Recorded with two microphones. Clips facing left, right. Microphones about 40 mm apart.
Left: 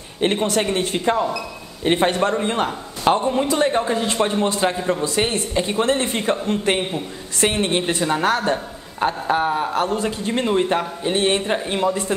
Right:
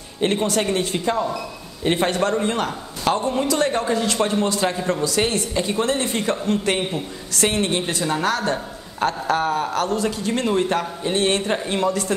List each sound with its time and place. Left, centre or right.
0.2 s a man's voice: left